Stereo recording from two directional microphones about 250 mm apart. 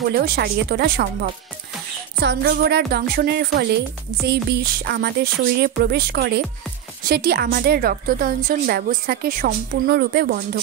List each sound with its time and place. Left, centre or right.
0.2 s a woman's voice: right
2.2 s a woman's voice: right